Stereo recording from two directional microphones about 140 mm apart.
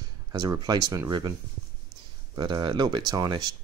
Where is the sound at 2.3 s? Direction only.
30° right (ahead or behind).